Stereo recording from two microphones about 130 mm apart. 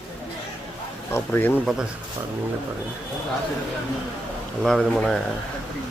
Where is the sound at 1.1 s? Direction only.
15° left (ahead or behind).